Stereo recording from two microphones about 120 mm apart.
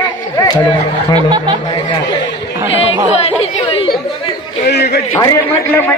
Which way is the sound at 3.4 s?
50° left (ahead or behind).